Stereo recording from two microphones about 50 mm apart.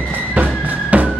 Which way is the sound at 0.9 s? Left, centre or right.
Right.